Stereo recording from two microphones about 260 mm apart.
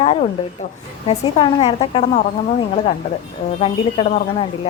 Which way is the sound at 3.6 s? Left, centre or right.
Left.